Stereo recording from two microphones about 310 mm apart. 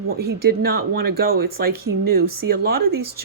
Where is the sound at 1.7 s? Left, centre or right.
Right.